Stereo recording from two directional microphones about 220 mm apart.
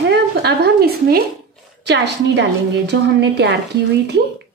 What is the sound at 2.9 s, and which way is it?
Speech, 50° right (ahead or behind).